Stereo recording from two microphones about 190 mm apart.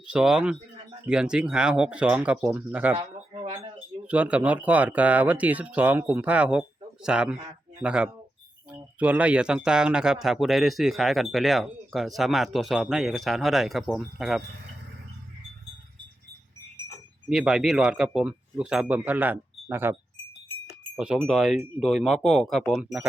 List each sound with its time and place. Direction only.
0.1 s speech: 5° right (ahead or behind)
2.9 s a sound: 25° right (ahead or behind)
4.0 s speech: 5° right (ahead or behind)
17.2 s speech: 5° right (ahead or behind)